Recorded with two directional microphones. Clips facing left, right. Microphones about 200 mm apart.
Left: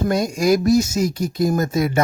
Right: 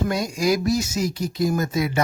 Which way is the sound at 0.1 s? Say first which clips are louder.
Left 4 dB; 45° left (ahead or behind).